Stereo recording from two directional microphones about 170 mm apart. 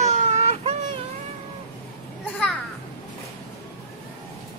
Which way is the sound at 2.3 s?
5° left (ahead or behind).